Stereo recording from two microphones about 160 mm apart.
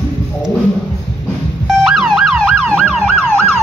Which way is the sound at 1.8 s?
Centre (ahead or behind).